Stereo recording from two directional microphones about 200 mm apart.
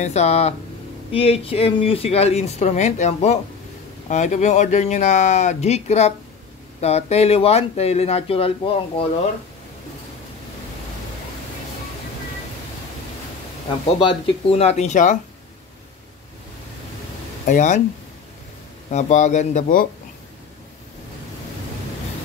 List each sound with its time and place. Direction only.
0.0 s speech: 35° left (ahead or behind)
14.0 s speech: 30° left (ahead or behind)
17.5 s speech: 40° left (ahead or behind)
18.9 s speech: 35° left (ahead or behind)